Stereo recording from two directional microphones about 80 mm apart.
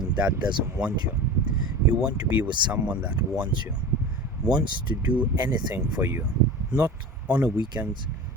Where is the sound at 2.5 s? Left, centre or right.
Right.